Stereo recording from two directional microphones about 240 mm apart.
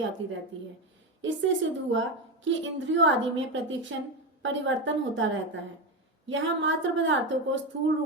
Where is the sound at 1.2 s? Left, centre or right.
Right.